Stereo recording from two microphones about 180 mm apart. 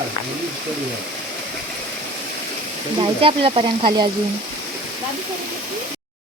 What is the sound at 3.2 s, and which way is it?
Frying, 30° right (ahead or behind).